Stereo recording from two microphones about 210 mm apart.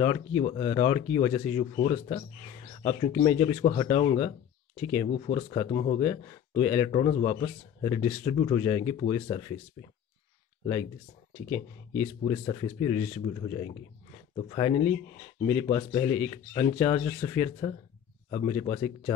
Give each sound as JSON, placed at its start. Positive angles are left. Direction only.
{"t": 0.4, "sound": "speech", "side_deg": 25}
{"t": 10.6, "sound": "speech", "side_deg": 20}
{"t": 12.2, "sound": "speech", "side_deg": 25}